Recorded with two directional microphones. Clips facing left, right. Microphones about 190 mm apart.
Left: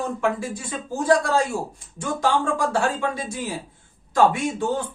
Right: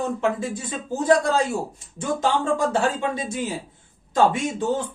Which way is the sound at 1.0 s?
25° right (ahead or behind).